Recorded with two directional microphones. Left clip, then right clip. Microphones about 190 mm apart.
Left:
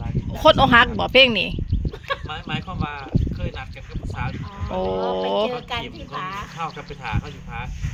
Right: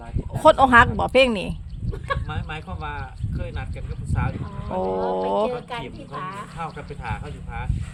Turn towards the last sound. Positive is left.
turn(degrees=-10)  # may be behind; listen again after turning